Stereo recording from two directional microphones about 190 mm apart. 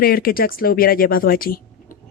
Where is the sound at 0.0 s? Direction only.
50° left (ahead or behind).